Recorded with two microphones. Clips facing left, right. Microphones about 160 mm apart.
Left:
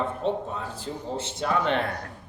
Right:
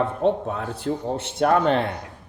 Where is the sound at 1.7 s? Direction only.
30° right (ahead or behind).